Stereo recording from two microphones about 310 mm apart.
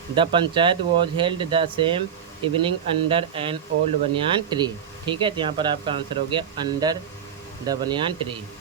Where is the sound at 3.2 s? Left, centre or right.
Centre.